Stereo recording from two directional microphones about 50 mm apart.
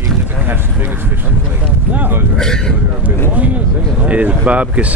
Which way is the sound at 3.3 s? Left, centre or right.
Right.